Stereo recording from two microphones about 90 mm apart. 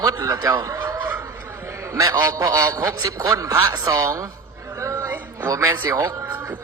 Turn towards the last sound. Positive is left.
turn(degrees=-35)  # may be behind; listen again after turning